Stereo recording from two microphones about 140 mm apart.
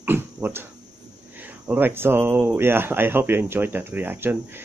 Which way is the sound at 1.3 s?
10° right (ahead or behind).